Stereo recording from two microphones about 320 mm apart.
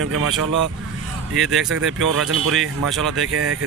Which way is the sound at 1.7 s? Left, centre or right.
Right.